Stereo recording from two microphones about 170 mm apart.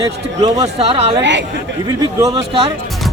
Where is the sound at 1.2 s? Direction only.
90° right.